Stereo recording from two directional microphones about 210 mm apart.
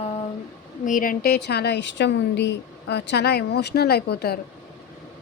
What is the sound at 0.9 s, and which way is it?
A woman's voice, 40° left (ahead or behind).